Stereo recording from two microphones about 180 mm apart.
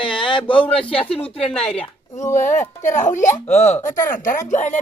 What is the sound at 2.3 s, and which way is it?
Speech, 40° left (ahead or behind).